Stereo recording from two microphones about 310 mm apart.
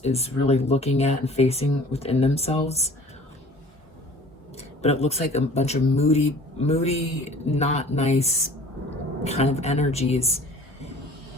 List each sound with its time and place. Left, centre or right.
0.0 s speech: centre
4.5 s speech: centre